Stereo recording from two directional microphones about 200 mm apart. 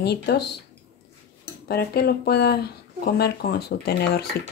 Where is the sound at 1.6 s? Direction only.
50° left (ahead or behind).